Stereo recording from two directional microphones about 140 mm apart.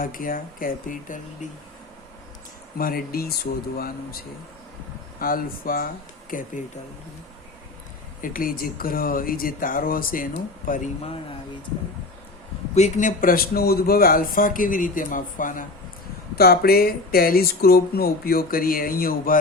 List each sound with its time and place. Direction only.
0.0 s speech: 90° left; by 1.5 s 70° left (ahead or behind)
2.7 s speech: 90° left
6.3 s speech: 75° left (ahead or behind)
8.2 s speech: 90° left
10.7 s speech: 75° left (ahead or behind)
12.7 s speech: 60° left (ahead or behind)
16.3 s speech: 90° left